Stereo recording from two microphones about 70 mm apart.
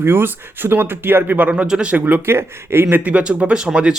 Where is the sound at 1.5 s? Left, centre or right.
Centre; by 3.0 s right.